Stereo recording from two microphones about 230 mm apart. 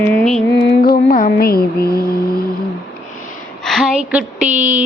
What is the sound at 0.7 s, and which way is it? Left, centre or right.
Music, left.